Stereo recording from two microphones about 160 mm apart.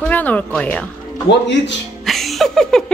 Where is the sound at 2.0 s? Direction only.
Centre (ahead or behind).